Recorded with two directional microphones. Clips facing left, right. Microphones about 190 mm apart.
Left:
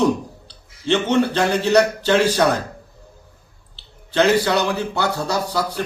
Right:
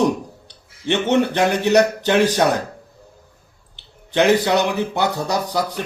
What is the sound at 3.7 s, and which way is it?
A man's voice, 15° right (ahead or behind).